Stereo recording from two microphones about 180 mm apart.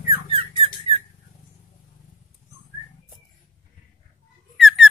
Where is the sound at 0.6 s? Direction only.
30° right (ahead or behind).